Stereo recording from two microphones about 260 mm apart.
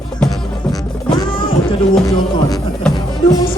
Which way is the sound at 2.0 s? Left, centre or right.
Centre.